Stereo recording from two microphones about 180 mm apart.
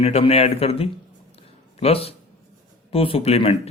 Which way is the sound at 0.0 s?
35° left (ahead or behind).